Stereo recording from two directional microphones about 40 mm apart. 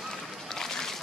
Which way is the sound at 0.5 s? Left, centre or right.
Centre.